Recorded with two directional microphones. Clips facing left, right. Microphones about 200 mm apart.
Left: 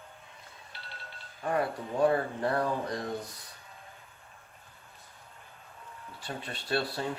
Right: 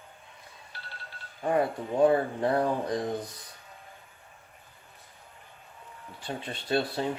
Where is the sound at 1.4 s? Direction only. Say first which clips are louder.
Right 4 dB; 25° right (ahead or behind).